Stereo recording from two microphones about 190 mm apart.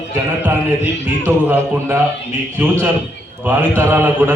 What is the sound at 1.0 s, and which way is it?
A man's voice, 10° right (ahead or behind).